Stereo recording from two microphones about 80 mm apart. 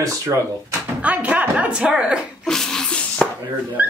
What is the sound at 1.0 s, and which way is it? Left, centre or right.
Speech, centre.